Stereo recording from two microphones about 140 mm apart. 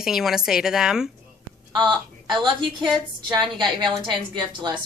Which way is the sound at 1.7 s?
35° right (ahead or behind).